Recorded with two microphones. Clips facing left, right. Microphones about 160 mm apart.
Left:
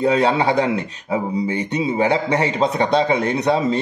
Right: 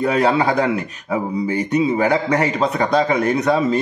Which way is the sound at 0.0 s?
25° left (ahead or behind).